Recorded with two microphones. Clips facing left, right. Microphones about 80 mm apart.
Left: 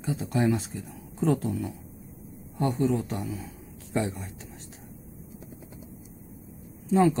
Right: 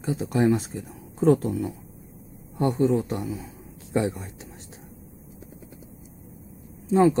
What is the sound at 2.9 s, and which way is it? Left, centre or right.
Speech, right.